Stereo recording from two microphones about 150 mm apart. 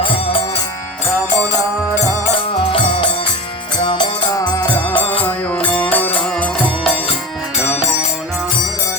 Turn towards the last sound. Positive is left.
turn(degrees=-5)  # may be behind; listen again after turning